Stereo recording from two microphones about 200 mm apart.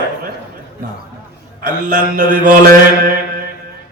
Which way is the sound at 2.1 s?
40° right (ahead or behind).